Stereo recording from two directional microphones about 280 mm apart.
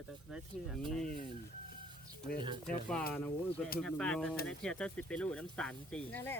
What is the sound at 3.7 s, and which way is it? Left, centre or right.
Speech, centre.